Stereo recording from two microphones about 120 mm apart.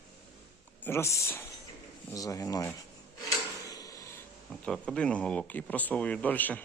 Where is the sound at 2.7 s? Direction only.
30° left (ahead or behind).